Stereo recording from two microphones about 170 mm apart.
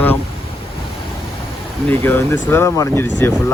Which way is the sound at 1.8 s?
10° left (ahead or behind).